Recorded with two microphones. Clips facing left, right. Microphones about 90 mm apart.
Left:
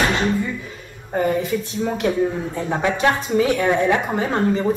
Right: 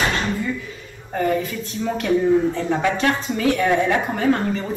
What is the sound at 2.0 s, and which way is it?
A woman's voice, 15° left (ahead or behind).